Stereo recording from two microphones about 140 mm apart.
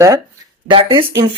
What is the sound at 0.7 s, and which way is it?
Speech, 35° right (ahead or behind).